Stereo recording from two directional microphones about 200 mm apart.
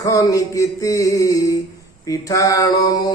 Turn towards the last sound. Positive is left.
turn(degrees=20)  # may be behind; listen again after turning